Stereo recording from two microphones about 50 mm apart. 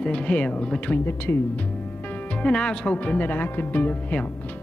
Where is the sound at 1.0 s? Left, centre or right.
Left.